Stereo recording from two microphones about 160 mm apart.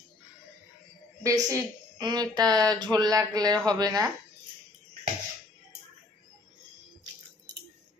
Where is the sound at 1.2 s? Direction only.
20° right (ahead or behind).